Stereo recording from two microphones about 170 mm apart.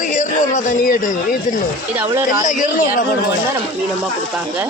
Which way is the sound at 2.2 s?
50° left (ahead or behind).